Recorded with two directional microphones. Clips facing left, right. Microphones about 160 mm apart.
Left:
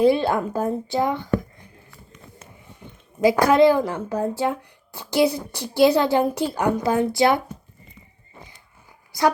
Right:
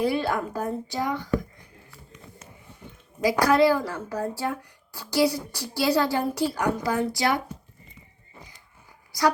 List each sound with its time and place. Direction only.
0.0 s speech: 25° left (ahead or behind)
3.4 s speech: 20° left (ahead or behind)